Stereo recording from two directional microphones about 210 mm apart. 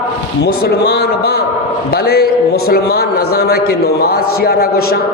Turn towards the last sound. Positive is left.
turn(degrees=45)  # may be behind; listen again after turning